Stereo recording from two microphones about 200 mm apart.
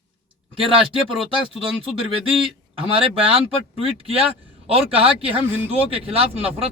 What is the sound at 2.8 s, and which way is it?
A man's voice, 25° right (ahead or behind).